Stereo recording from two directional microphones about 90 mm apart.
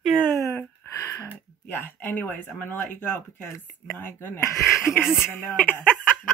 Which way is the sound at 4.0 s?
25° left (ahead or behind).